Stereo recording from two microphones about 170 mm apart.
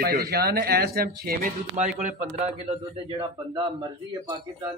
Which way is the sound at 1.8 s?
50° right (ahead or behind).